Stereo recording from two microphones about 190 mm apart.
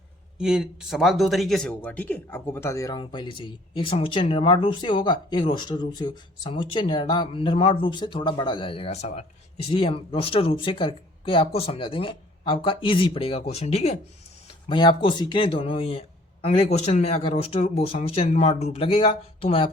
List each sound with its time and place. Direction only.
0.3 s speech: 5° right (ahead or behind); by 13.9 s 35° left (ahead or behind)
14.7 s speech: 25° left (ahead or behind)